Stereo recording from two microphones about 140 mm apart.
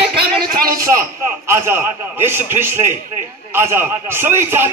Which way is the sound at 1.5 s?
15° right (ahead or behind).